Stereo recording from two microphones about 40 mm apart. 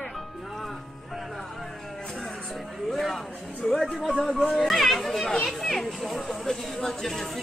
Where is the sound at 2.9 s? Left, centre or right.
Centre.